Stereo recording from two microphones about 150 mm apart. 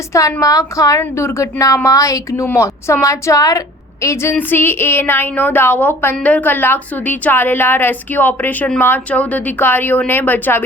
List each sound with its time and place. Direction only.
0.1 s a woman's voice: 20° left (ahead or behind)